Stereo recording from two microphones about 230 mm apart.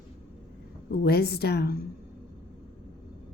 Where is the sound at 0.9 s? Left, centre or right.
Left.